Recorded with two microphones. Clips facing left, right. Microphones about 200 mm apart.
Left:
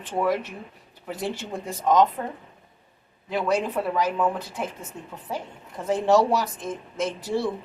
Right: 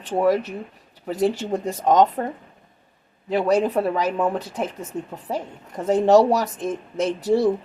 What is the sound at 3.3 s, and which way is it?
Speech, 40° right (ahead or behind).